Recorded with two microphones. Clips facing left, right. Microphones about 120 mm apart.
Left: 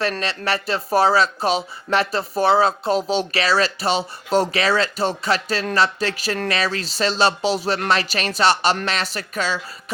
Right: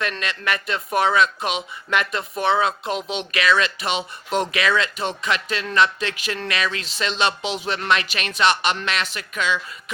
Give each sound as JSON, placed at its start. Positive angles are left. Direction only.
{"t": 0.0, "sound": "speech", "side_deg": 35}